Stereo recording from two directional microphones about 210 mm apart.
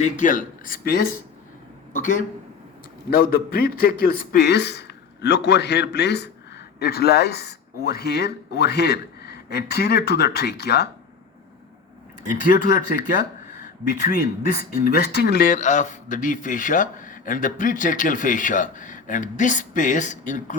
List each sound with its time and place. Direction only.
0.0 s speech: 40° left (ahead or behind)
12.3 s speech: 40° left (ahead or behind)